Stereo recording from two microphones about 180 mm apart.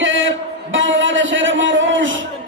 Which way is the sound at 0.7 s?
90° right.